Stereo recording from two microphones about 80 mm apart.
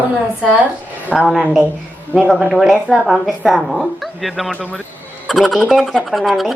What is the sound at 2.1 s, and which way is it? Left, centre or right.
Speech, right.